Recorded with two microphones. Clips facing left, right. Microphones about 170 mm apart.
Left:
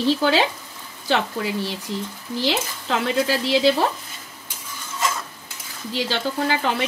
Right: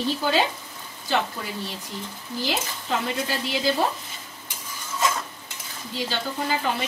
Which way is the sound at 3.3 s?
90° left.